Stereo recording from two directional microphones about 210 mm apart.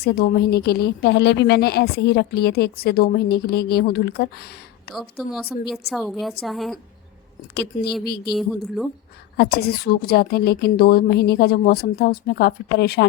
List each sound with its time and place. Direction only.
0.0 s a woman's voice: 50° left (ahead or behind)
4.9 s a woman's voice: centre (ahead or behind)
7.5 s a woman's voice: 50° left (ahead or behind)
8.3 s a woman's voice: centre (ahead or behind)
9.4 s a woman's voice: 50° left (ahead or behind)